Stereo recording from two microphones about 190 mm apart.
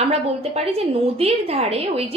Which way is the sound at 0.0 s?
35° right (ahead or behind).